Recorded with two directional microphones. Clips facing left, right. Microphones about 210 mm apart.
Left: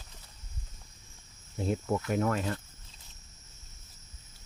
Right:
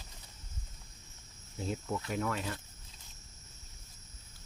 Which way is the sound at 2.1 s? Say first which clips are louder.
Left 5 dB; 45° left (ahead or behind).